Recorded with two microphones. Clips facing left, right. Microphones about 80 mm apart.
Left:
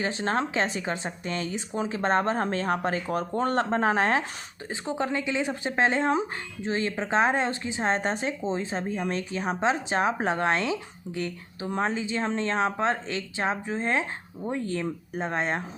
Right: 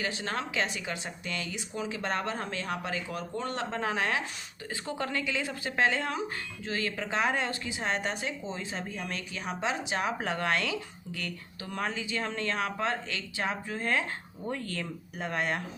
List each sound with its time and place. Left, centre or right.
0.0 s a woman's voice: left
4.7 s speech: left